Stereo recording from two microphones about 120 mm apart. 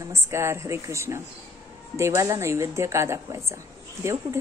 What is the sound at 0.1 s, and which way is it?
A woman's voice, 25° right (ahead or behind).